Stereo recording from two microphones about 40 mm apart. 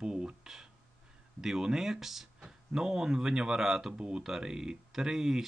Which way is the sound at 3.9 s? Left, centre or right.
Right.